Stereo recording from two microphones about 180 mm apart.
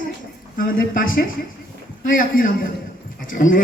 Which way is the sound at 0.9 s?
50° left (ahead or behind).